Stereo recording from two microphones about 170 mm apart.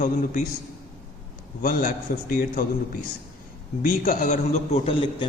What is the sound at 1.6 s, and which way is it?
A man's voice, 55° left (ahead or behind).